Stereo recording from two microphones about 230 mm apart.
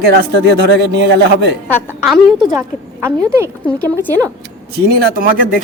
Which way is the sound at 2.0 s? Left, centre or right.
Centre.